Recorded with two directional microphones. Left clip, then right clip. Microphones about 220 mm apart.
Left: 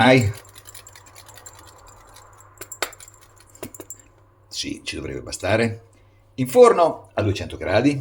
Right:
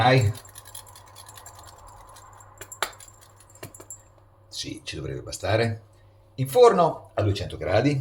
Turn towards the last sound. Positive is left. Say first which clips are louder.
# left 3 dB
turn(degrees=20)  # may be behind; listen again after turning